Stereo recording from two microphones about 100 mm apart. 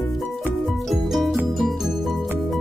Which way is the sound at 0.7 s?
Centre (ahead or behind).